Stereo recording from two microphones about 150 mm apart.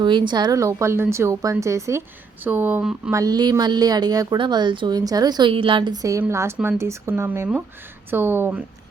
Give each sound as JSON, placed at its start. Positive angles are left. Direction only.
{"t": 0.0, "sound": "speech", "side_deg": -30}